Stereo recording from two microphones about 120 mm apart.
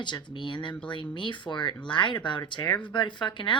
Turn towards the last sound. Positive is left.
turn(degrees=40)  # may be behind; listen again after turning